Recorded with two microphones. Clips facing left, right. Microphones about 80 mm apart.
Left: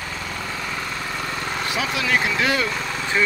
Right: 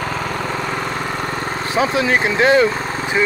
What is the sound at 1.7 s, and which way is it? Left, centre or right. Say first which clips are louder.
Speech: right 7 dB; right.